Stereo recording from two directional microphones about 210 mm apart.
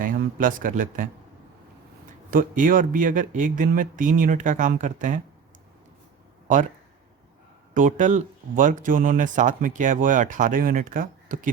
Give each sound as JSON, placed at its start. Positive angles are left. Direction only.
{"t": 0.0, "sound": "speech", "side_deg": -40}
{"t": 2.3, "sound": "speech", "side_deg": -40}
{"t": 6.5, "sound": "speech", "side_deg": -35}
{"t": 7.7, "sound": "speech", "side_deg": -40}